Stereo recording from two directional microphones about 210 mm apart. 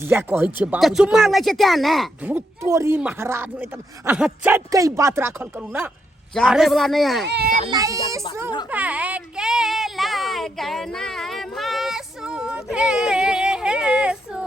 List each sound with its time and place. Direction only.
0.0 s a man's voice: 10° right (ahead or behind)
7.3 s speech: 50° right (ahead or behind)
7.7 s speech: 15° right (ahead or behind)
8.7 s a sound: 5° right (ahead or behind)